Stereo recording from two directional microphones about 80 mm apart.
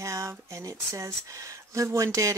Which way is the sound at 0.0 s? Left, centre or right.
Right.